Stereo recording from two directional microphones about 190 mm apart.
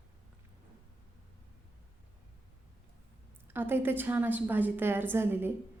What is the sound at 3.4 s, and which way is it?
A woman's voice, 10° right (ahead or behind).